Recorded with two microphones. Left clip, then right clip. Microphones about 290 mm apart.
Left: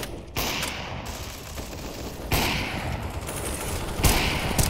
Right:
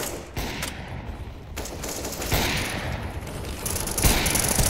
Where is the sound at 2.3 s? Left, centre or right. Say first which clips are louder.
Even; centre.